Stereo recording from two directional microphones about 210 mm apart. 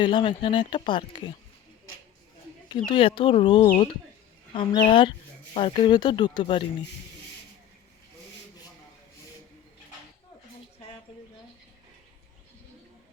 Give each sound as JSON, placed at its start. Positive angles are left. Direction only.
{"t": 0.0, "sound": "speech", "side_deg": 25}
{"t": 2.8, "sound": "speech", "side_deg": 25}